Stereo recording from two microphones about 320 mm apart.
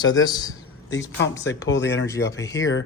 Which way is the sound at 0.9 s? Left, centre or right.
Left.